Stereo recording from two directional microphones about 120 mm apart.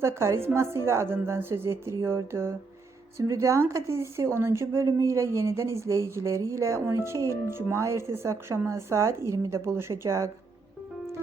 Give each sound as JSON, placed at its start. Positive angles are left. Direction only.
{"t": 0.0, "sound": "a woman's voice", "side_deg": -20}